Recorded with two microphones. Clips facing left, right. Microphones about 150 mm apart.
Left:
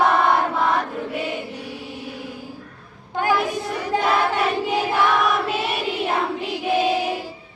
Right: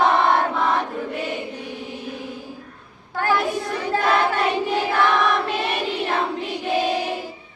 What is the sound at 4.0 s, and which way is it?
Choir, centre (ahead or behind).